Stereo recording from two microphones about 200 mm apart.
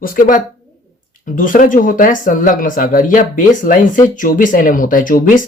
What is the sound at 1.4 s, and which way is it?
Speech, 40° left (ahead or behind).